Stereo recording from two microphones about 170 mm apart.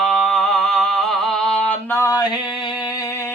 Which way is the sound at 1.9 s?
15° left (ahead or behind).